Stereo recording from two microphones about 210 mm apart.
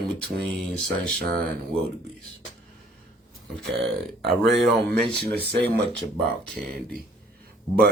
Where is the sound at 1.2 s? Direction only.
50° right (ahead or behind).